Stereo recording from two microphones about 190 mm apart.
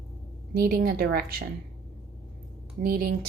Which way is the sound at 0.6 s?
50° right (ahead or behind).